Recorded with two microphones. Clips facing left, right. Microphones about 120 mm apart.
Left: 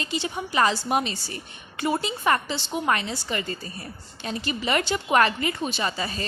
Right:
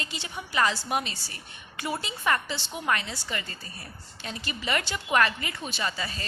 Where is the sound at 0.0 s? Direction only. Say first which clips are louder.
Left 8 dB; 25° left (ahead or behind).